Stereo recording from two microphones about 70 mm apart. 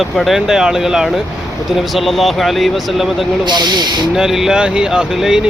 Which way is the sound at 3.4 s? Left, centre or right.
Right.